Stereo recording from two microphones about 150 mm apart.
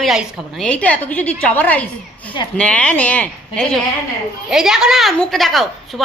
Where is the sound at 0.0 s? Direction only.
5° right (ahead or behind).